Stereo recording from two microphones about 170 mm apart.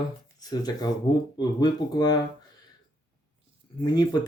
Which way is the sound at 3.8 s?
25° left (ahead or behind).